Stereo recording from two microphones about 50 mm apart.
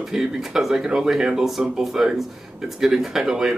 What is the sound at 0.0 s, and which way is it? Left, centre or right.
Speech, centre.